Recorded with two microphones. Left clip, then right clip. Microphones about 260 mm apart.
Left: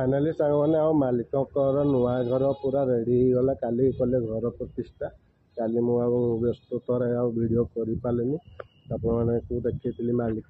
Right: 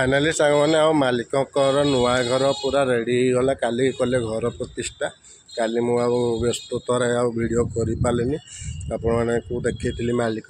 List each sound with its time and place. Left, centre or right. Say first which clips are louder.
0.0 s speech: right 6 dB; right